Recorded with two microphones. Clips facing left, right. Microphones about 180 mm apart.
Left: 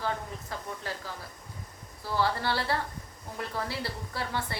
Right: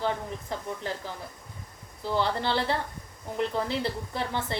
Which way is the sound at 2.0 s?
20° right (ahead or behind).